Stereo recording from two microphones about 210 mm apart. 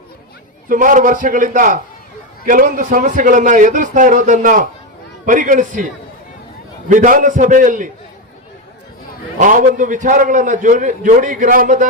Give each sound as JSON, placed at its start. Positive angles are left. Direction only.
{"t": 0.7, "sound": "a man's voice", "side_deg": -40}
{"t": 9.4, "sound": "a man's voice", "side_deg": -40}